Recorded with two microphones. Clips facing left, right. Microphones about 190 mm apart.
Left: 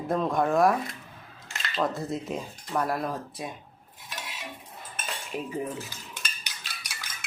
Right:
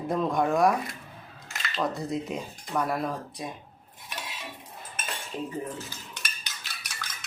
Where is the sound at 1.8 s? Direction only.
Centre (ahead or behind).